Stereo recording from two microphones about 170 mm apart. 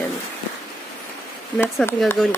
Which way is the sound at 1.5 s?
5° left (ahead or behind).